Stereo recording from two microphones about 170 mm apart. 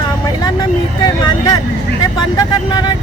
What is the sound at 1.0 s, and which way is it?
Speech, 25° left (ahead or behind).